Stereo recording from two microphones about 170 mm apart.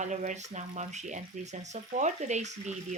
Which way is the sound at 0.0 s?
45° right (ahead or behind).